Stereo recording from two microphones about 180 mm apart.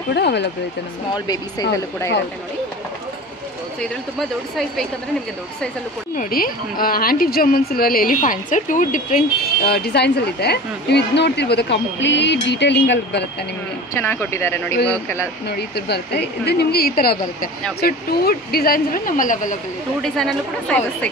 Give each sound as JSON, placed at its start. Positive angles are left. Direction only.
{"t": 0.1, "sound": "speech", "side_deg": 70}
{"t": 1.1, "sound": "speech", "side_deg": 20}
{"t": 4.2, "sound": "speech", "side_deg": 0}
{"t": 6.1, "sound": "speech", "side_deg": 55}
{"t": 13.9, "sound": "speech", "side_deg": 10}
{"t": 15.4, "sound": "speech", "side_deg": 65}
{"t": 20.0, "sound": "speech", "side_deg": 0}